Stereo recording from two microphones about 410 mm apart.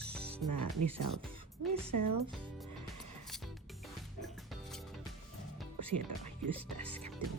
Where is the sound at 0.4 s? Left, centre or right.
Right.